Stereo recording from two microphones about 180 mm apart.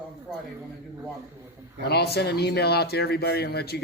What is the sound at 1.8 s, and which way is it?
Speech, 65° left (ahead or behind).